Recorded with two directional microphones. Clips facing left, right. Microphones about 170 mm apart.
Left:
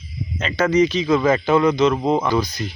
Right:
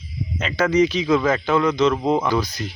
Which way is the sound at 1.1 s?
15° left (ahead or behind).